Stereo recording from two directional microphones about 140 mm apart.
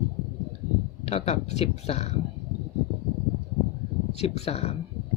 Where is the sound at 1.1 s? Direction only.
50° left (ahead or behind).